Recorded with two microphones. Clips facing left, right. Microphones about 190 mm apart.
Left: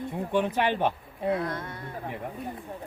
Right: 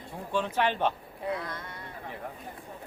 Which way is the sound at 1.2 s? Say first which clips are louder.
Left 6 dB; 25° left (ahead or behind).